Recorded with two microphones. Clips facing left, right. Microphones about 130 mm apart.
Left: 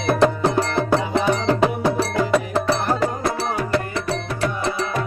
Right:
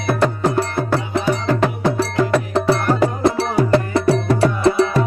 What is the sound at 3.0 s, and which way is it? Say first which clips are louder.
Music: right 5 dB; 25° right (ahead or behind).